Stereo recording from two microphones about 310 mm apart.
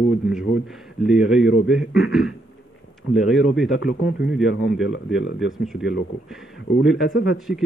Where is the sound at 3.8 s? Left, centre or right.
Left.